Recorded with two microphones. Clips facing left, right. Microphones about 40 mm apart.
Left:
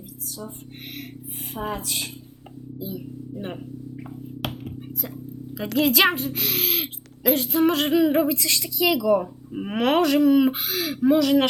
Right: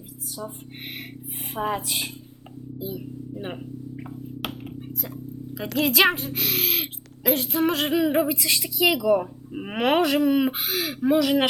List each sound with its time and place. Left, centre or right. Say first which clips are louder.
0.3 s speech: right 2 dB; right
5.0 s a woman's voice: even; centre